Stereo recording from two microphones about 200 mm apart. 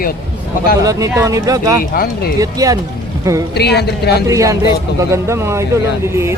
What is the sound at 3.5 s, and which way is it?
Speech, 55° left (ahead or behind).